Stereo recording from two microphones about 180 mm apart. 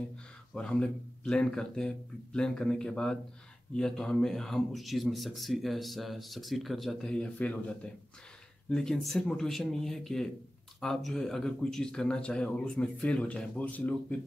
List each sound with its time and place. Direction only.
0.6 s speech: 5° left (ahead or behind)